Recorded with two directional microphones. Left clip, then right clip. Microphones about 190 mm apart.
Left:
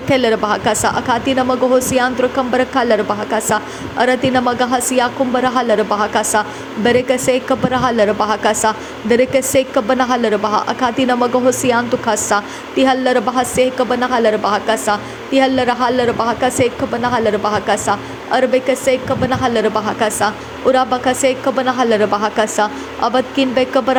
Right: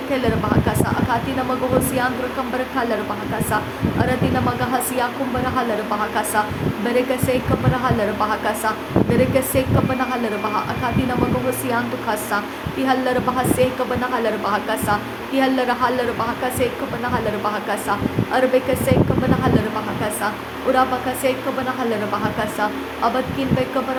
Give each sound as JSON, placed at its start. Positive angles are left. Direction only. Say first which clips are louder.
{"t": 0.1, "sound": "a woman's voice", "louder": "left 7 dB", "side_deg": 40}
{"t": 20.7, "sound": "a woman's voice", "louder": "left 4 dB", "side_deg": 40}